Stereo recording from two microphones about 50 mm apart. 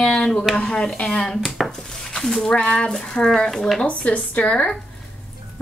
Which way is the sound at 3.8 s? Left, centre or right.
Left.